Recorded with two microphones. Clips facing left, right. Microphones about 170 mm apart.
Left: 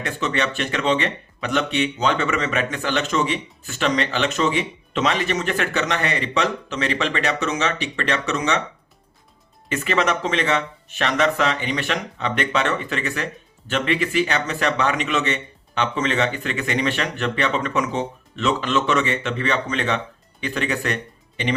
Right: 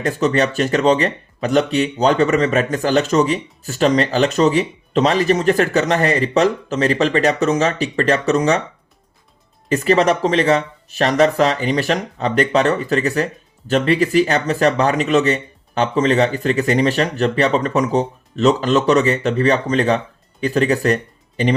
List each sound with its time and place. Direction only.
0.0 s speech: 40° right (ahead or behind)
9.6 s speech: 35° right (ahead or behind)